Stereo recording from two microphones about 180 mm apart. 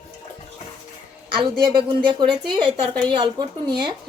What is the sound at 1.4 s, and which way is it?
A woman's voice, 30° right (ahead or behind).